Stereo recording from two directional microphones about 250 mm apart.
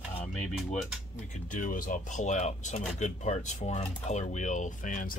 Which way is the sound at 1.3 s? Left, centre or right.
Left.